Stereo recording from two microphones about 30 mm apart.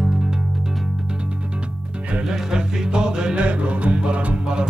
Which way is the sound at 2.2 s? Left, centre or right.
Right.